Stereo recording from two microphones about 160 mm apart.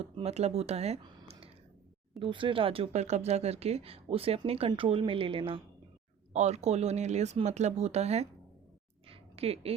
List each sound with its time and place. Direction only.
0.0 s speech: 40° right (ahead or behind)
2.2 s speech: 30° right (ahead or behind)
6.3 s speech: 45° right (ahead or behind)
9.0 s a sound: 35° right (ahead or behind)